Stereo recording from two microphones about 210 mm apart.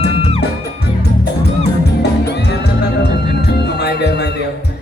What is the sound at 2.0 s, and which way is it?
Music, 55° left (ahead or behind).